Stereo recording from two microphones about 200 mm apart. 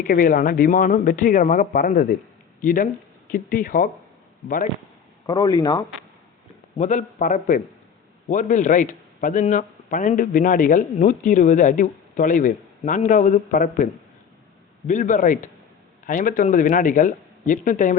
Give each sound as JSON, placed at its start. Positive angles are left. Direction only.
{"t": 0.0, "sound": "speech", "side_deg": 45}
{"t": 5.2, "sound": "speech", "side_deg": 20}
{"t": 6.7, "sound": "speech", "side_deg": 40}
{"t": 14.8, "sound": "speech", "side_deg": 40}